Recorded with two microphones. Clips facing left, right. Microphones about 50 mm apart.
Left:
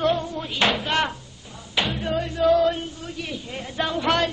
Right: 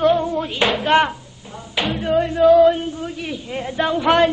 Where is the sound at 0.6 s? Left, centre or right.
Centre.